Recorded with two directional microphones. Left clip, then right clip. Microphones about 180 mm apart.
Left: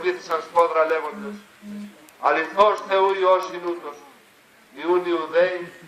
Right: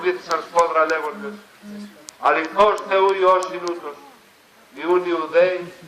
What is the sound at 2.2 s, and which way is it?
A man's voice, 55° left (ahead or behind).